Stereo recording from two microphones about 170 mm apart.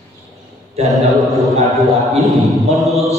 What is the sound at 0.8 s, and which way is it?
A man's voice, centre (ahead or behind).